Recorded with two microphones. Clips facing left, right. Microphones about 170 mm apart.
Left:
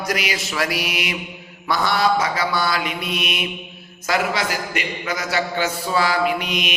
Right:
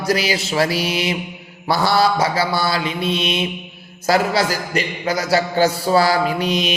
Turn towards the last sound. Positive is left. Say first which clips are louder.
# right 3 dB
turn(degrees=-30)  # may be behind; listen again after turning